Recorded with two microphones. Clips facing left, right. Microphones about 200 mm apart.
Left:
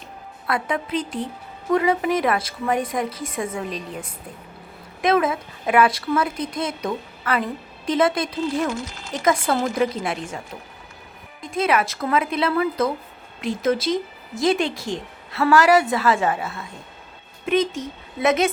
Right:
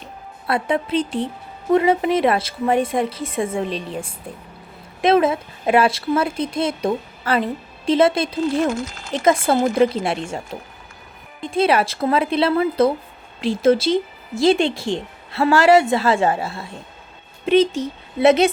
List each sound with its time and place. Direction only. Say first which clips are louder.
0.4 s speech: right 4 dB; 25° right (ahead or behind)
8.7 s speech: right 4 dB; 50° right (ahead or behind)
9.1 s a woman's voice: right 4 dB; 25° right (ahead or behind)